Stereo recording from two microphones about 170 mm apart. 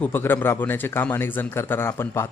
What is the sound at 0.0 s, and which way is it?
Speech, 10° left (ahead or behind).